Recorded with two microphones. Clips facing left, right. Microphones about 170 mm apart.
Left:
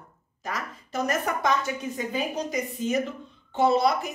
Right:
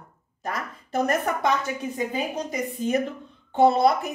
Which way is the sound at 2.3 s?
55° right (ahead or behind).